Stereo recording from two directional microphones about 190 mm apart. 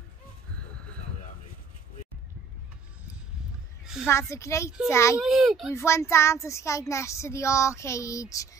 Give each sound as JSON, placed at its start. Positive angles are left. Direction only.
{"t": 3.8, "sound": "a sound", "side_deg": -5}
{"t": 4.1, "sound": "speech", "side_deg": 15}
{"t": 5.2, "sound": "speech", "side_deg": 0}
{"t": 5.8, "sound": "speech", "side_deg": 15}